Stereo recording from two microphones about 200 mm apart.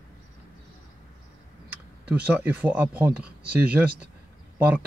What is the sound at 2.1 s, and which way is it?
Speech, 10° right (ahead or behind).